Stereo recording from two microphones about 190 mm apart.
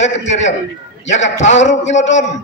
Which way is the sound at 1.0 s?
35° left (ahead or behind).